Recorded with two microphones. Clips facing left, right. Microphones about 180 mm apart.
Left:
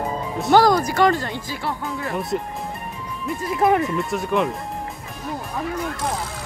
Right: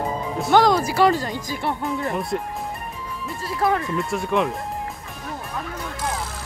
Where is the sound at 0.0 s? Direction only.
Centre (ahead or behind).